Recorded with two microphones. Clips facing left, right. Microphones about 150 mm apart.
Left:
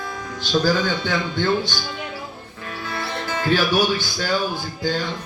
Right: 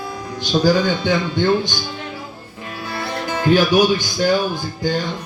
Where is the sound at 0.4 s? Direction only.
15° right (ahead or behind).